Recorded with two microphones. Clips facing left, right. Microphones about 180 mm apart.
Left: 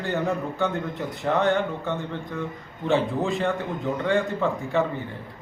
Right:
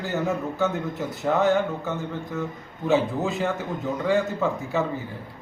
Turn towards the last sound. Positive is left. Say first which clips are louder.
# left 1 dB
turn(degrees=-5)  # may be behind; listen again after turning